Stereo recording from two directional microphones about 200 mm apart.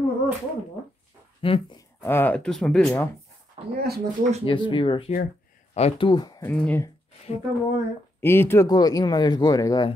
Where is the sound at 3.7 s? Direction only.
50° right (ahead or behind).